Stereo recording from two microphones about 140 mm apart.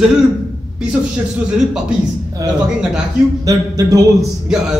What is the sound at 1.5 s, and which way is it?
Speech, 5° right (ahead or behind).